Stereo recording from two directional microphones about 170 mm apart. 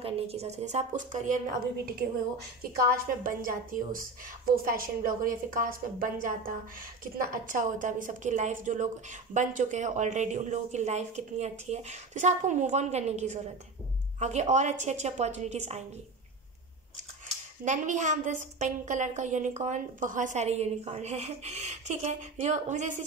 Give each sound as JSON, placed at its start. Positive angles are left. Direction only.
{"t": 0.0, "sound": "a woman's voice", "side_deg": -35}
{"t": 3.3, "sound": "a woman's voice", "side_deg": -55}
{"t": 17.6, "sound": "a woman's voice", "side_deg": -45}